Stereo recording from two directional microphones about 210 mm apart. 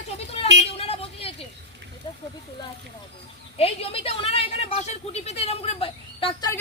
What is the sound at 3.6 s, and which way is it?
Speech, 30° left (ahead or behind).